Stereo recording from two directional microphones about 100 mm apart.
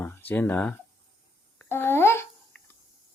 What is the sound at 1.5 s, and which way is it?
Babbling, 20° left (ahead or behind).